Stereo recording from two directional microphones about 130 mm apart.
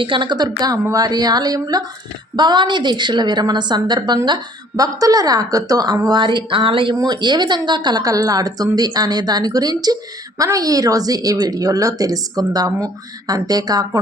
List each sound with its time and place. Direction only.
0.0 s a woman's voice: 40° right (ahead or behind)